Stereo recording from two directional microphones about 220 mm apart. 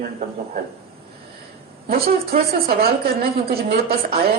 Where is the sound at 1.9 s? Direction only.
45° right (ahead or behind).